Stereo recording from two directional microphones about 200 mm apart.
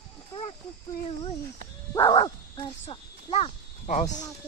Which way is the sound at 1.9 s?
20° left (ahead or behind).